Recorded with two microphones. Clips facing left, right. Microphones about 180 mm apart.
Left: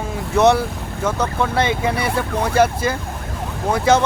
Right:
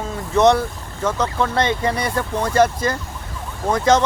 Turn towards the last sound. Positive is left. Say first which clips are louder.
# even
turn(degrees=10)  # may be behind; listen again after turning